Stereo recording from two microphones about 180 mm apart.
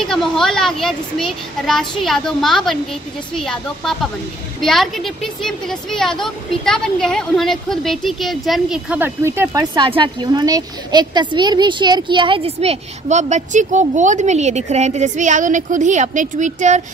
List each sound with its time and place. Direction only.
0.0 s a woman's voice: centre (ahead or behind); by 16.8 s 40° right (ahead or behind)